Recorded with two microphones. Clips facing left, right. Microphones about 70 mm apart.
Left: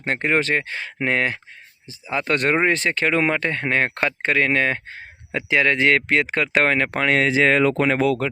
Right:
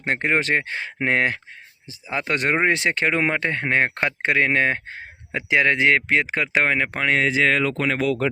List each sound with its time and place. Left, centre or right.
0.0 s speech: right
2.2 s speech: centre
2.6 s speech: right
5.8 s speech: centre
7.3 s speech: left